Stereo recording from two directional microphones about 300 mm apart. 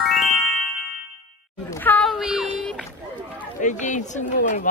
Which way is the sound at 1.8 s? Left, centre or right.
Centre.